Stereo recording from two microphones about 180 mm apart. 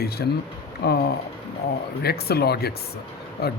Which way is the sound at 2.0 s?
60° left (ahead or behind).